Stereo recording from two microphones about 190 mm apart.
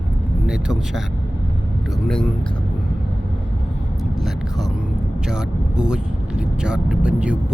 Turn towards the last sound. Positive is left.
turn(degrees=-5)  # may be behind; listen again after turning